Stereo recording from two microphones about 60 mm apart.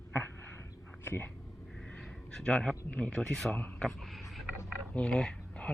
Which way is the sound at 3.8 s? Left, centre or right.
Centre.